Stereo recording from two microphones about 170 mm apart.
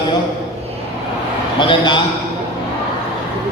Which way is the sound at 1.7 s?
25° left (ahead or behind).